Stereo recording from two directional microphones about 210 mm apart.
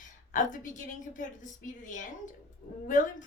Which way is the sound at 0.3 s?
35° left (ahead or behind).